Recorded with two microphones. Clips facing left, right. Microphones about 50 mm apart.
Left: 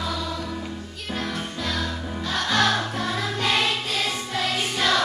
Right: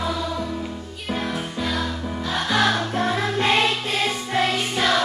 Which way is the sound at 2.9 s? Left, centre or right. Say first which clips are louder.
Right 5 dB; right.